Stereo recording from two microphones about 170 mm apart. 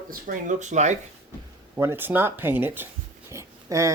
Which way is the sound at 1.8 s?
15° right (ahead or behind).